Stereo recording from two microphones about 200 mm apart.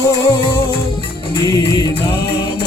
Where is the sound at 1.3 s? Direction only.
20° left (ahead or behind).